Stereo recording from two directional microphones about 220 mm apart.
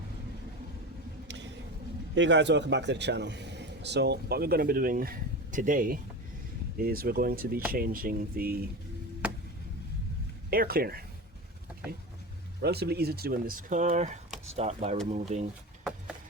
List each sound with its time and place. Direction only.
2.1 s speech: 55° right (ahead or behind)
10.5 s speech: 45° right (ahead or behind)
12.6 s speech: 45° right (ahead or behind); by 15.4 s 30° right (ahead or behind)